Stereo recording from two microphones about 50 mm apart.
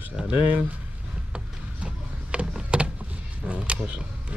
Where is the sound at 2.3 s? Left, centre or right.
Right.